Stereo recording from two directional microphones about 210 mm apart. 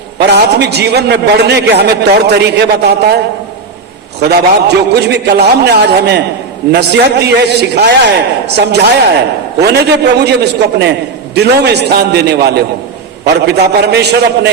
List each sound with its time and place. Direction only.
0.2 s a man's voice: 55° right (ahead or behind)
4.2 s a man's voice: 50° right (ahead or behind)